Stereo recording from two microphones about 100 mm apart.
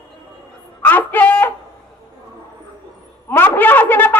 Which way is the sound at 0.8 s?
20° left (ahead or behind).